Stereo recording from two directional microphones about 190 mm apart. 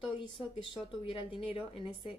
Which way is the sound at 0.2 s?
25° left (ahead or behind).